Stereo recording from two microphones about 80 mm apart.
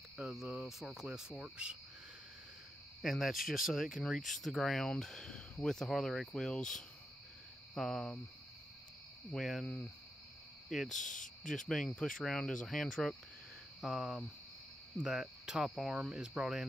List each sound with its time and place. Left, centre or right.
0.2 s speech: centre
1.4 s cricket: centre
3.0 s speech: centre
9.3 s speech: centre
10.7 s speech: centre
13.7 s speech: centre